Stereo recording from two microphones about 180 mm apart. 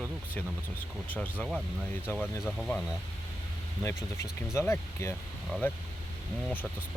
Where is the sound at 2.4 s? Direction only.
Centre (ahead or behind).